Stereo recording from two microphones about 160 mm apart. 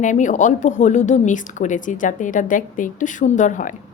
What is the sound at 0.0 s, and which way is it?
A woman's voice, 50° left (ahead or behind).